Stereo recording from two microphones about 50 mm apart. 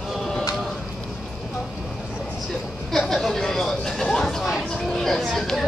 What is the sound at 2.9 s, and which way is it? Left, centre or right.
Chatter, centre.